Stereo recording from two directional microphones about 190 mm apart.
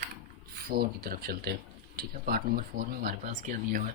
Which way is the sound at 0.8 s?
55° right (ahead or behind).